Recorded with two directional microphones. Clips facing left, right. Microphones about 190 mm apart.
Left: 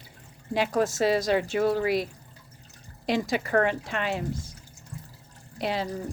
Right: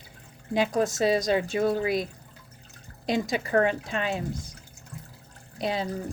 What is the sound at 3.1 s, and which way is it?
Speech, 20° right (ahead or behind).